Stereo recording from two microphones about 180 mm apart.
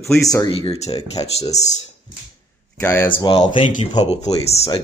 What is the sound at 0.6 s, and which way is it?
Speech, 35° left (ahead or behind).